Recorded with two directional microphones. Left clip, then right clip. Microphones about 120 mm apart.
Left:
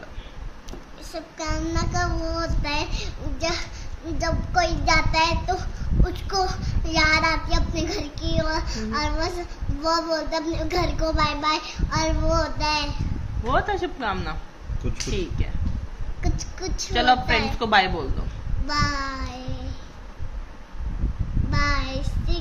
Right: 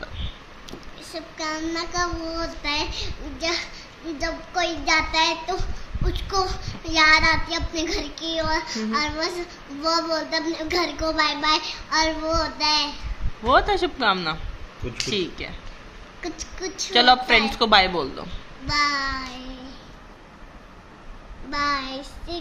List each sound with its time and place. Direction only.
0.7 s a child's voice: 15° left (ahead or behind)
13.5 s speech: 40° right (ahead or behind)
16.2 s a woman's voice: 10° left (ahead or behind)
16.9 s a woman's voice: 45° right (ahead or behind)
18.7 s child singing: 5° left (ahead or behind)
21.5 s child singing: centre (ahead or behind)